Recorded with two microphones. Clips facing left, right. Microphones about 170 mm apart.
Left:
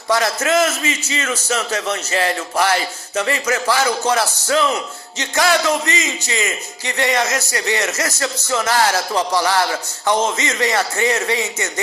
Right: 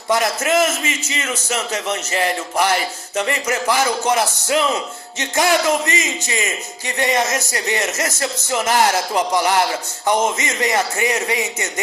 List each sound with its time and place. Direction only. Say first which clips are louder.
0.1 s a man's voice: even; 15° right (ahead or behind)